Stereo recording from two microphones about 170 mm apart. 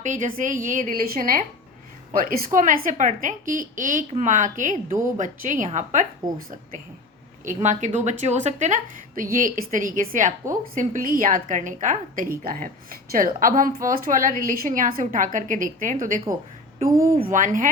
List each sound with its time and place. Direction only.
0.0 s a woman's voice: 50° right (ahead or behind)
2.5 s a woman's voice: 50° right (ahead or behind)
7.4 s a woman's voice: 45° right (ahead or behind)
16.9 s speech: 15° right (ahead or behind)
17.3 s a woman's voice: 50° right (ahead or behind)